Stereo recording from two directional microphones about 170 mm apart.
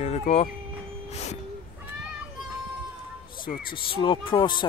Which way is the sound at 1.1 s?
40° left (ahead or behind).